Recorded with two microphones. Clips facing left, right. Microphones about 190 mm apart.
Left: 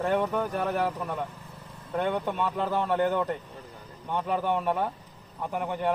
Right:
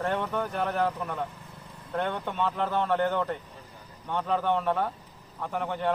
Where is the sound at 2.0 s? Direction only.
10° left (ahead or behind).